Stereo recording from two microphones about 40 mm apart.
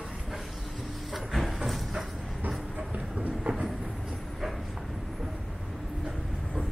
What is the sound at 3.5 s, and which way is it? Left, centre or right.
Train, right.